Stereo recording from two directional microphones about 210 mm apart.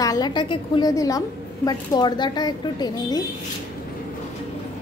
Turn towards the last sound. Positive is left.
turn(degrees=20)  # may be behind; listen again after turning